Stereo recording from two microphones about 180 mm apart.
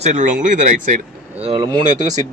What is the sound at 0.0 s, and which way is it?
Speech, 45° right (ahead or behind).